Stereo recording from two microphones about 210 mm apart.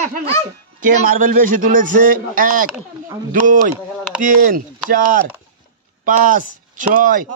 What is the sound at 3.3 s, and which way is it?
Speech, 40° right (ahead or behind).